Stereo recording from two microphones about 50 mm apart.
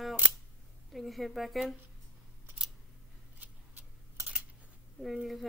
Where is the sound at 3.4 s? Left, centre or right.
Right.